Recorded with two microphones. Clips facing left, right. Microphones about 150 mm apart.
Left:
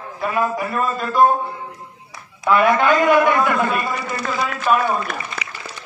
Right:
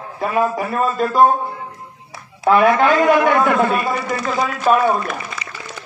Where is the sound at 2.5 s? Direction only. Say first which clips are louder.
Right 2 dB; 40° right (ahead or behind).